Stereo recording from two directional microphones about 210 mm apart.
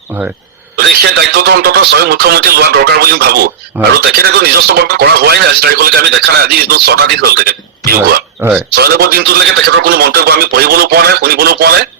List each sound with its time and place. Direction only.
0.1 s speech: 10° right (ahead or behind)
0.8 s speech: 50° right (ahead or behind)
3.8 s speech: 5° right (ahead or behind)
4.2 s speech: 45° right (ahead or behind)
8.4 s speech: 5° right (ahead or behind)
8.7 s speech: 45° right (ahead or behind)